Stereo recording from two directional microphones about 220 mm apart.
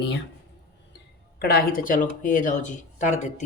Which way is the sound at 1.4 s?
45° left (ahead or behind).